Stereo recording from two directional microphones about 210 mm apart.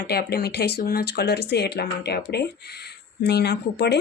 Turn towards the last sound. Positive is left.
turn(degrees=50)  # may be behind; listen again after turning